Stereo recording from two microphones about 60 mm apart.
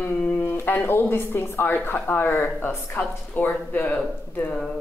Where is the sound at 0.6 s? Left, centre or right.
Left.